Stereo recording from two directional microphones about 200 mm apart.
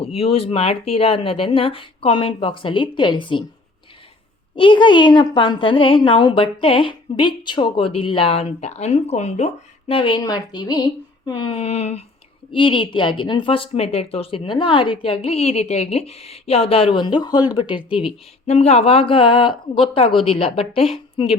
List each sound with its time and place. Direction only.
0.0 s a woman's voice: 30° left (ahead or behind)
4.5 s a woman's voice: 25° left (ahead or behind)